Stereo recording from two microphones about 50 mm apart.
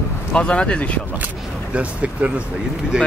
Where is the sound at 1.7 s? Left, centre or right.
Right.